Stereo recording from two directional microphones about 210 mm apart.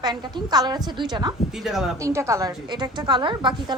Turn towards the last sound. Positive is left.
turn(degrees=-20)  # may be behind; listen again after turning